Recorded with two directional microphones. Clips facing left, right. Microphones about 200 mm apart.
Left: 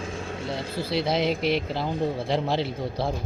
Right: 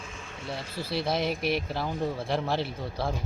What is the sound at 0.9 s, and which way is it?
Speech, 75° left (ahead or behind).